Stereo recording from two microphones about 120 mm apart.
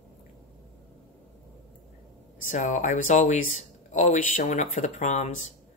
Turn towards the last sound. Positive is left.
turn(degrees=80)